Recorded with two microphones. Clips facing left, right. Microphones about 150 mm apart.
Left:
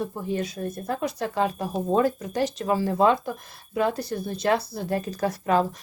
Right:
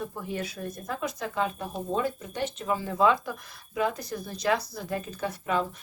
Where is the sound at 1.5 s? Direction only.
90° left.